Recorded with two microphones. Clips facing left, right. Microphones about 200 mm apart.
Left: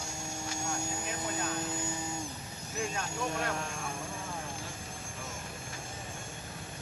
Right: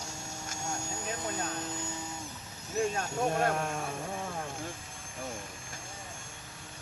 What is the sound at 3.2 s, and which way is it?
Speech, 55° right (ahead or behind).